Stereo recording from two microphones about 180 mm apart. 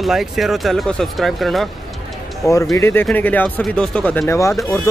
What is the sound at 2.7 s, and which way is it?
Speech, 15° left (ahead or behind).